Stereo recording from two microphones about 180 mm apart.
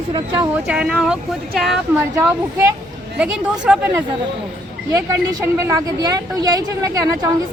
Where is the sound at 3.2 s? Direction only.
5° right (ahead or behind).